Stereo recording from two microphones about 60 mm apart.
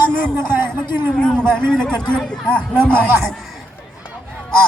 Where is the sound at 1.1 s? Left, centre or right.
Centre.